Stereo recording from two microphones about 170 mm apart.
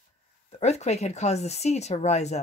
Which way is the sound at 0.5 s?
40° left (ahead or behind).